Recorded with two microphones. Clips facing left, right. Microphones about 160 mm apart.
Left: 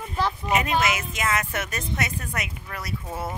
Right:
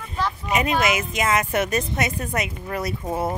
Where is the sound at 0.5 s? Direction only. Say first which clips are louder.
Right 3 dB; 20° right (ahead or behind).